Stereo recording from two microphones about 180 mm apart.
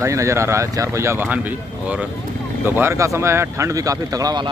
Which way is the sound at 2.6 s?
10° right (ahead or behind).